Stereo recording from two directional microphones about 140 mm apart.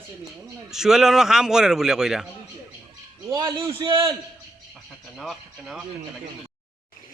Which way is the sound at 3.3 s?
30° right (ahead or behind).